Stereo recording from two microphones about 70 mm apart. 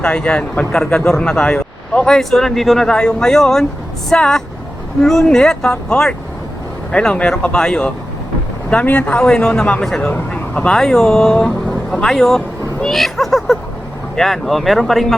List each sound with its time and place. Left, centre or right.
0.0 s speech: centre
10.1 s speech: centre
10.8 s speech: centre